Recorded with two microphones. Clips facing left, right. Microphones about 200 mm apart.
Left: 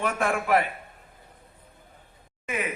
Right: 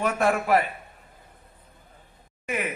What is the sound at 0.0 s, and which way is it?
Speech, 40° right (ahead or behind).